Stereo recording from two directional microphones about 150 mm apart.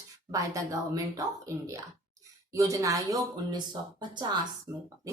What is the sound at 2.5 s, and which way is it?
Speech, 20° right (ahead or behind).